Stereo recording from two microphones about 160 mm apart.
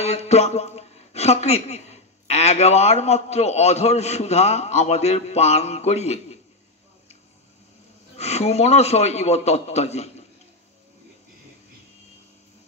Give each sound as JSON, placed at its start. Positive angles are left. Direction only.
{"t": 0.0, "sound": "a woman's voice", "side_deg": 40}
{"t": 8.2, "sound": "a woman's voice", "side_deg": 40}